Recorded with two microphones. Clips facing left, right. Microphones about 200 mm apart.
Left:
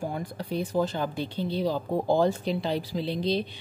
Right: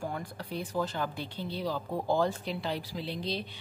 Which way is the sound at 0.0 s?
20° left (ahead or behind).